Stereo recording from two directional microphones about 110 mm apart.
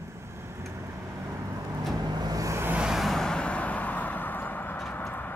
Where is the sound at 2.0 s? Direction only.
35° right (ahead or behind).